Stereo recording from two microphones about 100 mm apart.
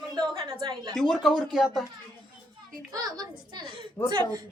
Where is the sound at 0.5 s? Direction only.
50° right (ahead or behind).